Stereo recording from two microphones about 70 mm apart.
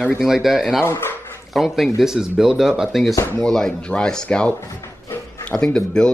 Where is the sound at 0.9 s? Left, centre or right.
Left.